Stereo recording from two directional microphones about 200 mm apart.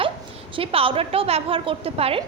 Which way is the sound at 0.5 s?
30° right (ahead or behind).